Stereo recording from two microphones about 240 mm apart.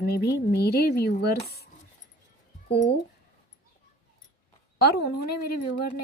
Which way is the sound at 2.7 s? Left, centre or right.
Left.